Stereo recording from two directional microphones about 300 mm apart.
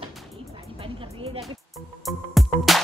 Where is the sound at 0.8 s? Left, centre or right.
Centre.